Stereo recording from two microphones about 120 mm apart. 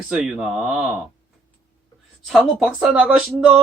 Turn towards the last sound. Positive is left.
turn(degrees=-10)  # may be behind; listen again after turning